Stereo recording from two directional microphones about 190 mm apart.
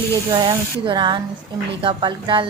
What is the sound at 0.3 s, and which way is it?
A woman's voice, 25° right (ahead or behind).